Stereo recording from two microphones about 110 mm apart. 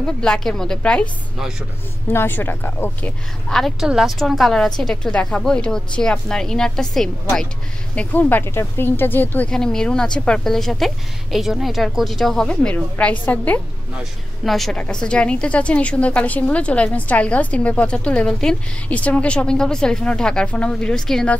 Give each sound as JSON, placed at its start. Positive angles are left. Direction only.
{"t": 0.0, "sound": "a woman's voice", "side_deg": 5}
{"t": 2.1, "sound": "speech", "side_deg": 20}
{"t": 3.4, "sound": "a woman's voice", "side_deg": 5}
{"t": 9.5, "sound": "a woman's voice", "side_deg": 5}
{"t": 14.4, "sound": "a woman's voice", "side_deg": 0}